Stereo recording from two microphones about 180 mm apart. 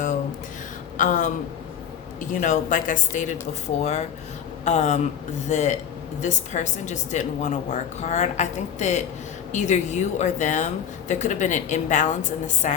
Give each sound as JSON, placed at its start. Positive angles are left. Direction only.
{"t": 0.9, "sound": "a woman's voice", "side_deg": 45}
{"t": 2.4, "sound": "a woman's voice", "side_deg": 45}